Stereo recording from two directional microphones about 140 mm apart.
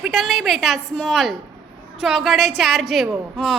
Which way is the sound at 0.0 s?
Centre (ahead or behind).